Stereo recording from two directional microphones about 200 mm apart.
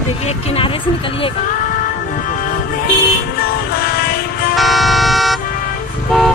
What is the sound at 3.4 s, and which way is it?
Music, 50° left (ahead or behind).